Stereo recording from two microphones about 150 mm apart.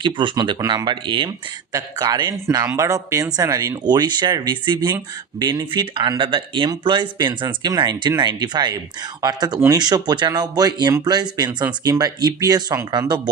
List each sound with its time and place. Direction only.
0.0 s speech: 30° right (ahead or behind)